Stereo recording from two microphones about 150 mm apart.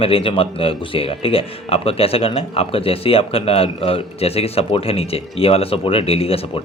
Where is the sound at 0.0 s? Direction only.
35° left (ahead or behind).